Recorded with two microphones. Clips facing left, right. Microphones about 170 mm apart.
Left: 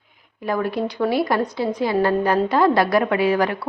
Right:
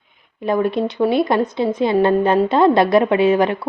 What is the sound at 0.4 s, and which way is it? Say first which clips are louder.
A woman's voice: right 4 dB; 25° right (ahead or behind).